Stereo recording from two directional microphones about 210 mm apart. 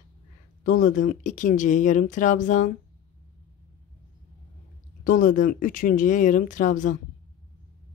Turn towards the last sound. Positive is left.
turn(degrees=40)  # may be behind; listen again after turning